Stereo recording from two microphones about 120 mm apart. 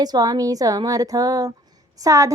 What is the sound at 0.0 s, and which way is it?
A woman's voice, 30° right (ahead or behind).